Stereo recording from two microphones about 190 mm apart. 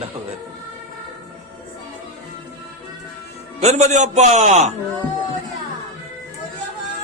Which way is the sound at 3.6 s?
35° right (ahead or behind).